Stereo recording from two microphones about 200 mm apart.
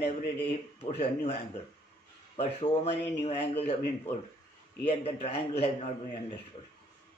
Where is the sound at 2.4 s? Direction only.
30° left (ahead or behind).